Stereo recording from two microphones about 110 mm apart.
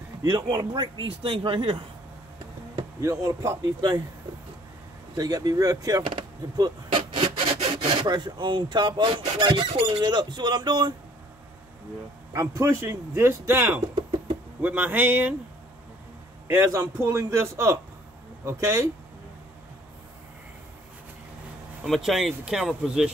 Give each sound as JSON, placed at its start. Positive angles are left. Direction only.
{"t": 0.2, "sound": "speech", "side_deg": -35}
{"t": 3.0, "sound": "a man's voice", "side_deg": -30}
{"t": 5.1, "sound": "a man's voice", "side_deg": -35}
{"t": 7.0, "sound": "rub", "side_deg": -50}
{"t": 7.5, "sound": "speech", "side_deg": -60}
{"t": 12.3, "sound": "speech", "side_deg": -25}
{"t": 16.4, "sound": "speech", "side_deg": -25}
{"t": 21.8, "sound": "speech", "side_deg": 0}